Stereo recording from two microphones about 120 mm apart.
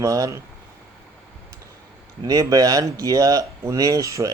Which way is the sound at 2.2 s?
30° right (ahead or behind).